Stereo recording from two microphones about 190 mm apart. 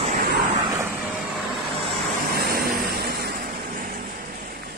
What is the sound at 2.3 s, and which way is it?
Vehicle, 55° right (ahead or behind).